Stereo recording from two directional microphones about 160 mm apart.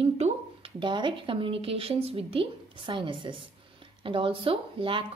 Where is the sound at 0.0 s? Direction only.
35° right (ahead or behind).